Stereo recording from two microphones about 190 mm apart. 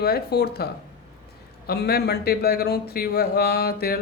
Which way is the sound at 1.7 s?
55° left (ahead or behind).